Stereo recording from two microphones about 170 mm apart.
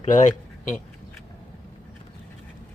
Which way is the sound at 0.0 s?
45° left (ahead or behind).